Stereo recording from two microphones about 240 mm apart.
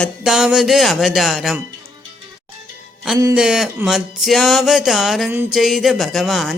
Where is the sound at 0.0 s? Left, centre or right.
Centre.